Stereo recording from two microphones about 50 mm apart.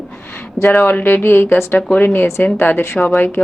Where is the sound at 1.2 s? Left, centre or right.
Left.